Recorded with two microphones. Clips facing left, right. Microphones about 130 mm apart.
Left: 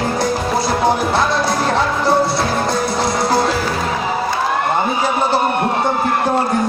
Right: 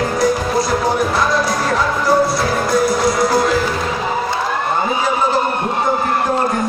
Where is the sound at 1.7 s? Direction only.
25° left (ahead or behind).